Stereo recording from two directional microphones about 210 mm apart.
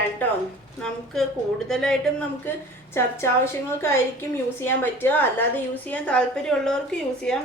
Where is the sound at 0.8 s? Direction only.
Centre (ahead or behind).